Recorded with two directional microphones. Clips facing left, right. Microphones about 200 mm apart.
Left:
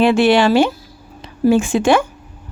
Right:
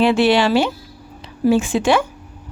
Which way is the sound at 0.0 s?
50° left (ahead or behind).